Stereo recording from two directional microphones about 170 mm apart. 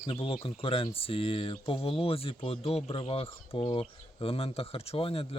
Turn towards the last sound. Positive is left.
turn(degrees=35)  # may be behind; listen again after turning